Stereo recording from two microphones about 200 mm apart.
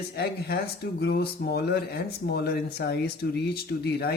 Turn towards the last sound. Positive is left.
turn(degrees=55)  # may be behind; listen again after turning